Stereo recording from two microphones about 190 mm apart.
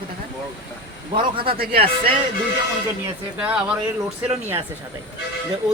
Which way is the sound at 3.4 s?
5° right (ahead or behind).